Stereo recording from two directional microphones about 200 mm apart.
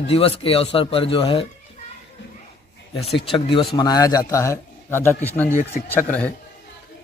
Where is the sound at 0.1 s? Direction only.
30° left (ahead or behind).